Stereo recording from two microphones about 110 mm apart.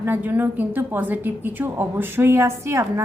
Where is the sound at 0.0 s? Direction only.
15° right (ahead or behind).